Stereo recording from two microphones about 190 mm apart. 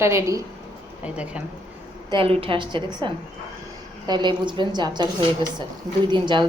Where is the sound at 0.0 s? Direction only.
15° right (ahead or behind).